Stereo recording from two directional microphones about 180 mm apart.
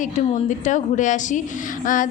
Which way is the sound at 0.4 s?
45° left (ahead or behind).